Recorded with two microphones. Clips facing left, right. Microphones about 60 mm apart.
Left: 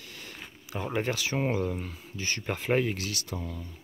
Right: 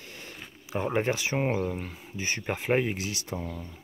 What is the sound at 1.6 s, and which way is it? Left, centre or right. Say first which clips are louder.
Speech: even; centre.